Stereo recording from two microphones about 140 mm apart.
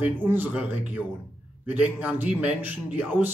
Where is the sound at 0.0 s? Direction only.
15° right (ahead or behind).